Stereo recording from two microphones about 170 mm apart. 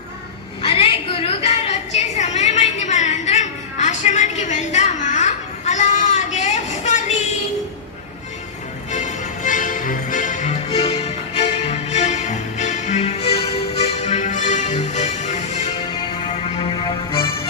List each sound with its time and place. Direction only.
0.6 s a sound: 35° left (ahead or behind)
8.9 s music: 45° left (ahead or behind)
10.7 s music: 35° left (ahead or behind)
16.2 s music: 30° left (ahead or behind)